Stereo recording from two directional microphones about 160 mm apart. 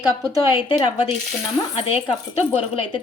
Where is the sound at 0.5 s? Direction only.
30° left (ahead or behind).